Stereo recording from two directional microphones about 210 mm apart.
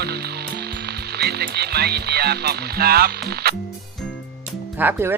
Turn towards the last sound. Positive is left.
turn(degrees=-10)  # may be behind; listen again after turning